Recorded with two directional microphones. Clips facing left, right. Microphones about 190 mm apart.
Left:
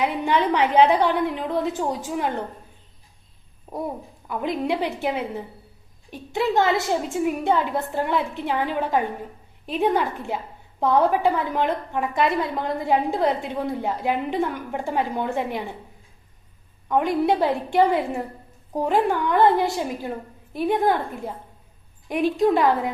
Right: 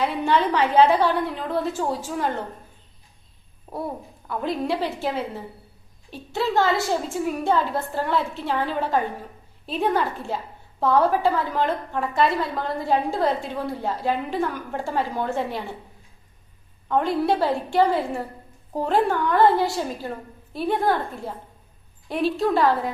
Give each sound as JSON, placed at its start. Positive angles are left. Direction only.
{"t": 0.0, "sound": "a woman's voice", "side_deg": 15}
{"t": 4.3, "sound": "a woman's voice", "side_deg": 15}
{"t": 16.9, "sound": "a woman's voice", "side_deg": 15}